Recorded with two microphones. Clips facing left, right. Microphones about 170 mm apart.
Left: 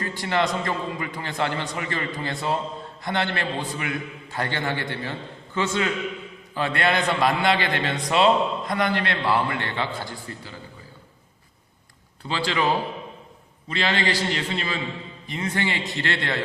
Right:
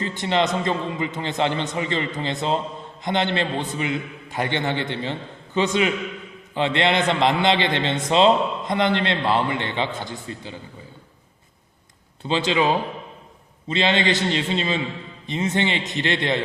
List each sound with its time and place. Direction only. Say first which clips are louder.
0.0 s a man's voice: right 2 dB; 20° right (ahead or behind)
12.2 s a man's voice: right 4 dB; 20° right (ahead or behind)